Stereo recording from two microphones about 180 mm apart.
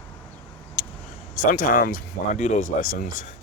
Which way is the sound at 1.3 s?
50° left (ahead or behind).